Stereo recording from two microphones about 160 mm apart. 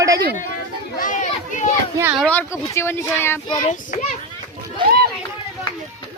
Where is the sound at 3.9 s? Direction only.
55° left (ahead or behind).